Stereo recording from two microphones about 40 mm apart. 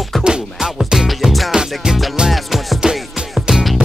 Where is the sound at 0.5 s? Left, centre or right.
Centre.